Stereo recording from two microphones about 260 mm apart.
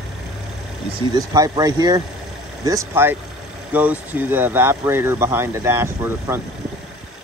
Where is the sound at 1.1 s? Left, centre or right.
Centre.